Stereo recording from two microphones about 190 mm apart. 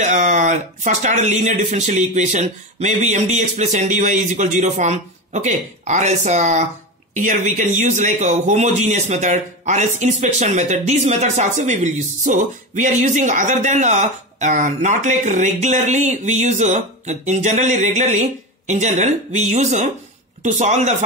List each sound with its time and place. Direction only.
0.0 s speech: 40° right (ahead or behind)